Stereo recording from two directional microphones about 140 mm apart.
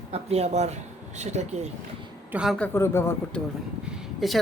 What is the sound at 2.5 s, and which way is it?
Speech, 15° left (ahead or behind).